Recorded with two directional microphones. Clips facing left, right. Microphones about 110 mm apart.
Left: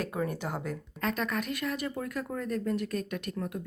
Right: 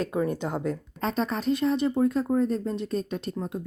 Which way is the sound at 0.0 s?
25° right (ahead or behind).